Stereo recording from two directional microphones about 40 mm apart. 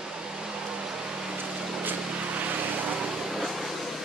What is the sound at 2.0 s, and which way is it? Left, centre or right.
Vehicle, right.